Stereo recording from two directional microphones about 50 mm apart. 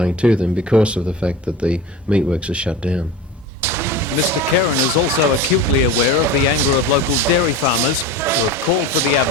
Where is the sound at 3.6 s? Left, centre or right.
Right.